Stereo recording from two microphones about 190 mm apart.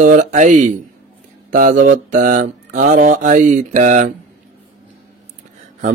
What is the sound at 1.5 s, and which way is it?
Mantra, 45° right (ahead or behind).